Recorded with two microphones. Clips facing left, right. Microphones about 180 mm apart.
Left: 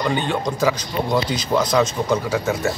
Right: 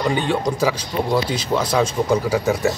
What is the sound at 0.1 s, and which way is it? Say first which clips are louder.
Speech: right 2 dB; centre (ahead or behind).